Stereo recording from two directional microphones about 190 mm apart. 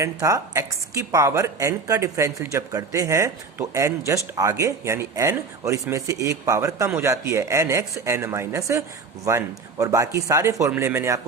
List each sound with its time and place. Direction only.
0.0 s a man's voice: 15° right (ahead or behind)